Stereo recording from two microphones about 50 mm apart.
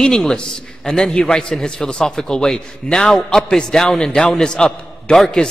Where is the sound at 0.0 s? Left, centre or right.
Centre.